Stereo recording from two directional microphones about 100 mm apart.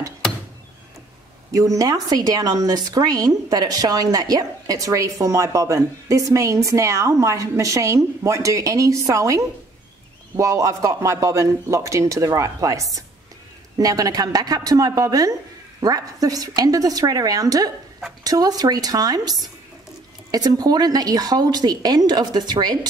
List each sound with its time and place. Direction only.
1.5 s a woman's voice: 35° right (ahead or behind)